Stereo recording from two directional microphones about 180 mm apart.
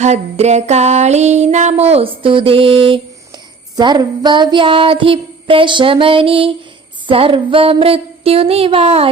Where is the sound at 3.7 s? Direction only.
25° right (ahead or behind).